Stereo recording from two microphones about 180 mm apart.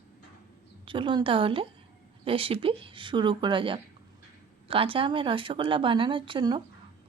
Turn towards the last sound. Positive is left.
turn(degrees=-25)  # may be behind; listen again after turning